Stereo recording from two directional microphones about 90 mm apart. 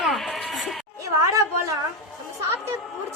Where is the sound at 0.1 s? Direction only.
5° left (ahead or behind).